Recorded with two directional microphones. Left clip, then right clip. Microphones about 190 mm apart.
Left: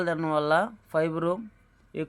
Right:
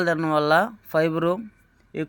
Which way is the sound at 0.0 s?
15° right (ahead or behind).